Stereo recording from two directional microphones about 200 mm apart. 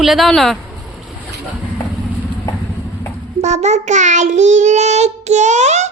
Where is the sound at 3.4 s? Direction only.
35° right (ahead or behind).